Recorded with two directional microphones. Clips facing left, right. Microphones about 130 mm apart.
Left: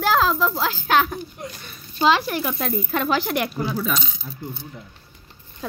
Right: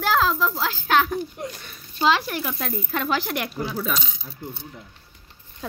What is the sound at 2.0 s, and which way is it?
Speech, 20° left (ahead or behind).